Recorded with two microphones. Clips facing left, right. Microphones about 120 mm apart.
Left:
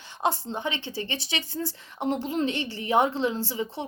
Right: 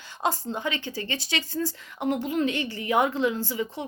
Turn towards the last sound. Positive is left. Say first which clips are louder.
# right 1 dB
turn(degrees=25)  # may be behind; listen again after turning